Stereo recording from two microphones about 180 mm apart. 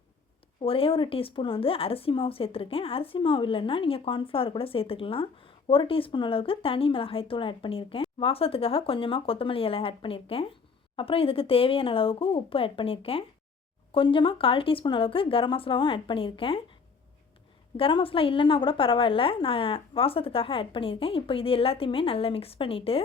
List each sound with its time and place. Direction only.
0.6 s a woman's voice: 30° left (ahead or behind)
17.7 s a woman's voice: 30° left (ahead or behind)